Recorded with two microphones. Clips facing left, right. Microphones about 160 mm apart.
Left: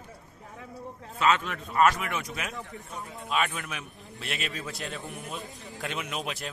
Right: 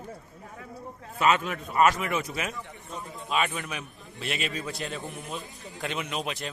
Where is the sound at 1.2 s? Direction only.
10° right (ahead or behind).